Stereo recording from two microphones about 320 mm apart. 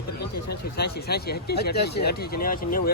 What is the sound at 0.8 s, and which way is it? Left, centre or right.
Speech, left.